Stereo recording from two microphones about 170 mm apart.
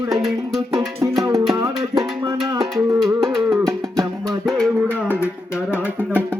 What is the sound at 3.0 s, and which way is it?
Music, centre (ahead or behind).